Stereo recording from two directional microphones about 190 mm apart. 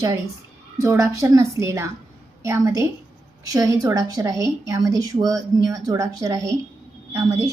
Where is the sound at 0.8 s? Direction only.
15° right (ahead or behind).